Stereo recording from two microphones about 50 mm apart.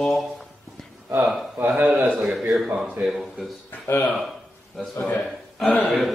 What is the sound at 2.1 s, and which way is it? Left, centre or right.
Speech, centre.